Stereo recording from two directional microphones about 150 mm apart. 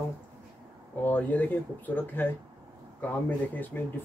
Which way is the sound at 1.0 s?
10° left (ahead or behind).